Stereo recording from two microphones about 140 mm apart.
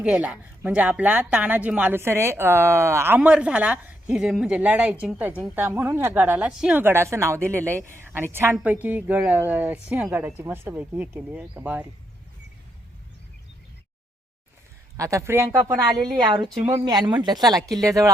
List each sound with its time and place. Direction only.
0.0 s a woman's voice: 10° right (ahead or behind)
14.9 s speech: 25° right (ahead or behind)
15.9 s speech: 30° right (ahead or behind)